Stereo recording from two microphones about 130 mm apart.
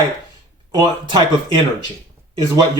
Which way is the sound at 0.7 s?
35° right (ahead or behind).